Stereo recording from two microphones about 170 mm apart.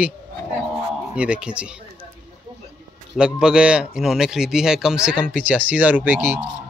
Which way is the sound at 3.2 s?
5° right (ahead or behind).